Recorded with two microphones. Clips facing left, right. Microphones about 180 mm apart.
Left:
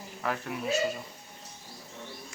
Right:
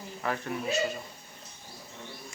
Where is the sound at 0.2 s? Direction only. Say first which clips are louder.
Even; centre (ahead or behind).